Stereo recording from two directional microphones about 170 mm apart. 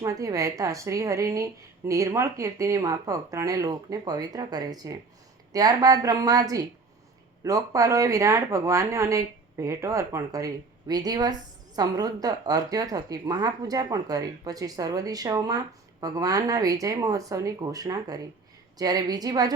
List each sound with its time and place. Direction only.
0.0 s speech: 20° right (ahead or behind)